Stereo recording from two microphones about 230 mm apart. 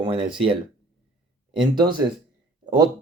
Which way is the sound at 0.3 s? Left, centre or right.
Right.